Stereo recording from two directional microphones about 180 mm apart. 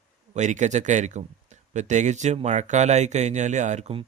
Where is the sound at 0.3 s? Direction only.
40° right (ahead or behind).